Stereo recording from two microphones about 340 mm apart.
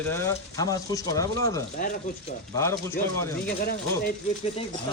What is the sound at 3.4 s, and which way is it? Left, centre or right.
Speech, left.